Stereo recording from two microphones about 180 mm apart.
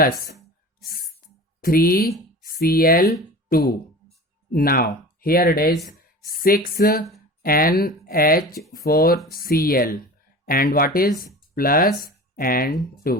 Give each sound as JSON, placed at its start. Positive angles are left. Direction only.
{"t": 0.9, "sound": "speech", "side_deg": 55}